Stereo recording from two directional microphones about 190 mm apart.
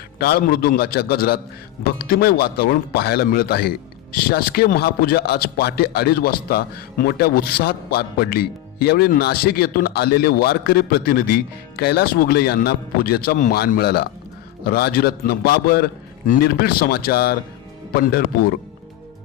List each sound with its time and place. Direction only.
0.2 s a man's voice: 55° left (ahead or behind)